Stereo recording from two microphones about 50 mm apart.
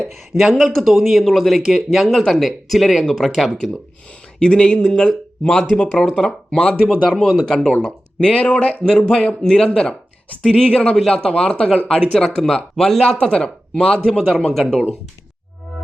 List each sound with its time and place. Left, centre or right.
0.6 s speech: centre
2.0 s speech: centre
4.4 s speech: centre